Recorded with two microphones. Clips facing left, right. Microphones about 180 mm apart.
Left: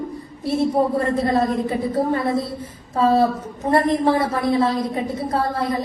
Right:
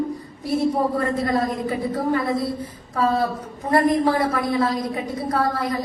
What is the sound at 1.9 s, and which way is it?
A woman's voice, 25° left (ahead or behind).